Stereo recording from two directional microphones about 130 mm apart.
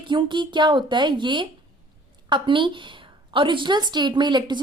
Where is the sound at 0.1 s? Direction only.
35° right (ahead or behind).